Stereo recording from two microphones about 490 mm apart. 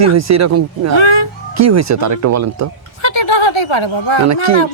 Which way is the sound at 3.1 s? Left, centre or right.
Left.